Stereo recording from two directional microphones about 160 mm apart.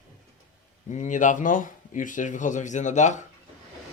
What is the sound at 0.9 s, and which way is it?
Speech, 50° left (ahead or behind).